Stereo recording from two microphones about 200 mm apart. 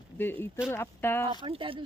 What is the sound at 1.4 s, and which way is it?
Speech, 25° right (ahead or behind).